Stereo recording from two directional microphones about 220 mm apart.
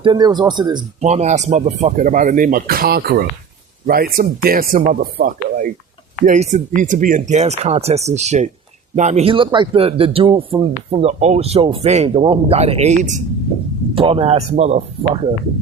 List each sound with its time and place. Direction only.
0.0 s speech: 20° right (ahead or behind)
1.0 s speech: 30° right (ahead or behind)